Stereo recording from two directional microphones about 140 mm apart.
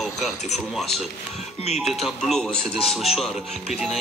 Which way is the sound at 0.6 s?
Centre (ahead or behind).